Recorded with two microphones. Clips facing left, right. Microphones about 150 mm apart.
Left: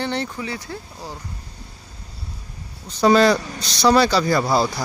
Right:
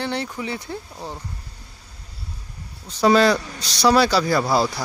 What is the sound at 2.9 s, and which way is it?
Speech, centre (ahead or behind).